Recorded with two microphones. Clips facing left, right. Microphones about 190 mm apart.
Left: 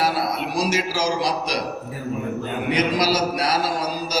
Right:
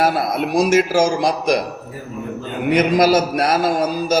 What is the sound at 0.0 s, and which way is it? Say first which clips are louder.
A man's voice: right 5 dB; 50° right (ahead or behind).